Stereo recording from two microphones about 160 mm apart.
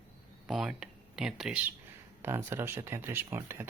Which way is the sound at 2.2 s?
15° right (ahead or behind).